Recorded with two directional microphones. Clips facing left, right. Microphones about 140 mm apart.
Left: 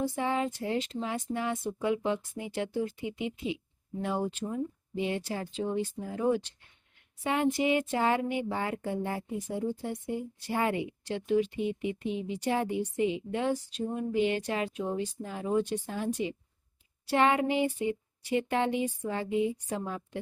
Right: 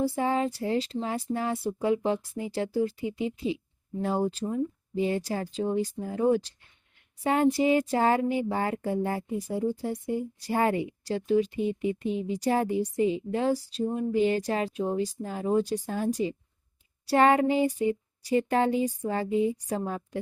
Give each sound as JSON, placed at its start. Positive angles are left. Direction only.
{"t": 0.0, "sound": "speech", "side_deg": -35}
{"t": 7.3, "sound": "speech", "side_deg": -40}